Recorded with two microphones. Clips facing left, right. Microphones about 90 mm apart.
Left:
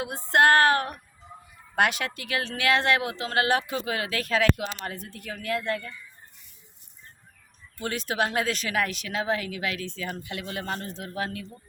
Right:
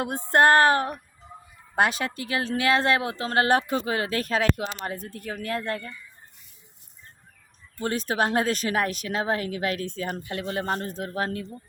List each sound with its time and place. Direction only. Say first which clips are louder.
0.3 s a sound: right 1 dB; 35° right (ahead or behind)
1.7 s speech: right 1 dB; 30° right (ahead or behind)
7.8 s speech: right 2 dB; 40° right (ahead or behind)